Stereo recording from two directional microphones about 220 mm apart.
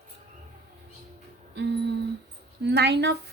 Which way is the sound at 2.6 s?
50° right (ahead or behind).